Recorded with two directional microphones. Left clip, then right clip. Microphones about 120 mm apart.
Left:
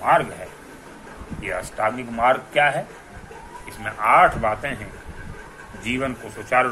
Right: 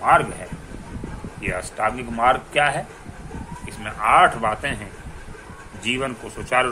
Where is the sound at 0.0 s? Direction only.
65° right (ahead or behind).